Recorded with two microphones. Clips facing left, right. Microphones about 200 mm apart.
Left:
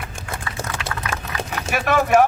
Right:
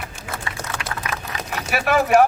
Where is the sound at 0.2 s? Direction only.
50° left (ahead or behind).